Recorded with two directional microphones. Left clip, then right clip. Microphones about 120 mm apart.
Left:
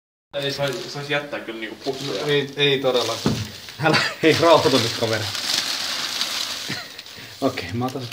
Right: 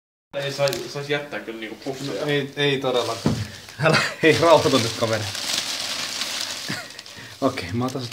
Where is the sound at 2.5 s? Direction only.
25° right (ahead or behind).